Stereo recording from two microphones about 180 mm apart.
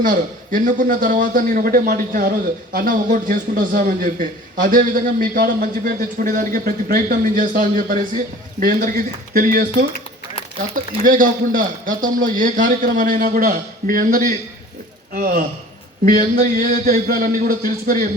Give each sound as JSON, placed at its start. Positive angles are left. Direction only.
{"t": 0.0, "sound": "a man's voice", "side_deg": -50}